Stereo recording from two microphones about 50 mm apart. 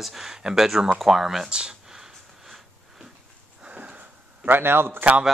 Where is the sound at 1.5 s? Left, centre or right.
Centre.